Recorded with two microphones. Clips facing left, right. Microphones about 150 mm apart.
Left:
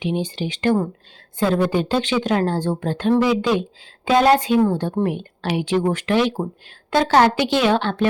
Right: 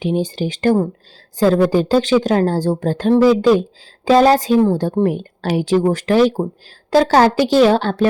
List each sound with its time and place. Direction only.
0.0 s a woman's voice: 45° right (ahead or behind)